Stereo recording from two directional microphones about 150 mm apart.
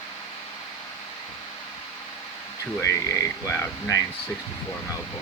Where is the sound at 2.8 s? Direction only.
20° left (ahead or behind).